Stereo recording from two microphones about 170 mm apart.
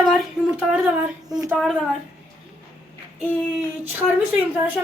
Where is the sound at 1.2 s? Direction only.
20° right (ahead or behind).